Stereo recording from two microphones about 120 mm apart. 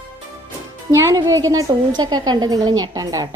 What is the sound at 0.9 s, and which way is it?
Speech, 25° right (ahead or behind).